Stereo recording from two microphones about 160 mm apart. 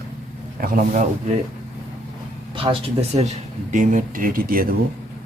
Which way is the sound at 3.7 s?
50° right (ahead or behind).